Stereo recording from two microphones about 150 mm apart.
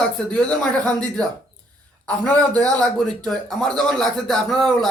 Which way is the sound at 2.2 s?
10° left (ahead or behind).